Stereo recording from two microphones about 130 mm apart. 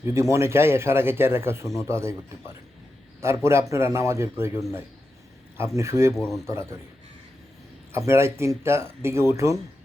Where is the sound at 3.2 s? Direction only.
20° right (ahead or behind).